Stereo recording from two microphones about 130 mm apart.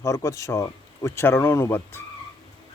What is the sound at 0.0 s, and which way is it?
Speech, 25° left (ahead or behind).